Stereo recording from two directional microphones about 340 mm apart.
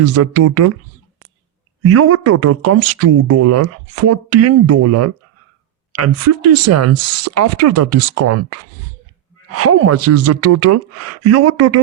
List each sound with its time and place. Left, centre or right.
0.0 s speech: right
1.9 s speech: right
6.5 s speech: right